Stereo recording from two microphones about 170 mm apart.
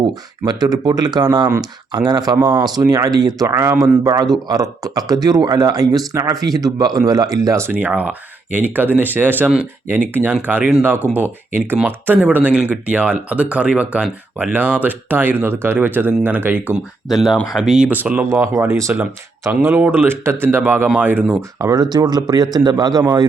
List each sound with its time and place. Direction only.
0.1 s speech: 25° right (ahead or behind)